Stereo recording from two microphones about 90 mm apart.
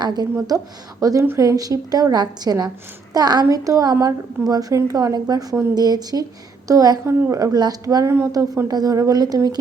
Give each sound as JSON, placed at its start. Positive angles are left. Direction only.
{"t": 0.0, "sound": "a woman's voice", "side_deg": -50}
{"t": 0.3, "sound": "a woman's voice", "side_deg": -40}
{"t": 7.0, "sound": "a woman's voice", "side_deg": -25}
{"t": 7.3, "sound": "a woman's voice", "side_deg": -45}